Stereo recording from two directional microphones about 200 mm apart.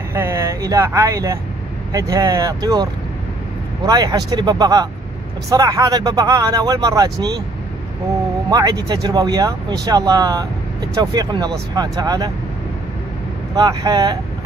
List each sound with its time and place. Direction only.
0.1 s speech: 15° right (ahead or behind)
8.5 s speech: 20° right (ahead or behind)
13.6 s speech: 20° right (ahead or behind)